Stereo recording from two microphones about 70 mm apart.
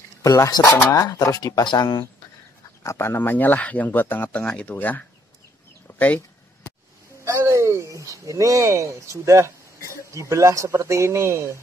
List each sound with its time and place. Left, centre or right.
0.2 s speech: left
0.5 s speech: left
0.9 s speech: left
2.8 s speech: left
4.3 s speech: centre
5.9 s a sound: left
7.2 s speech: right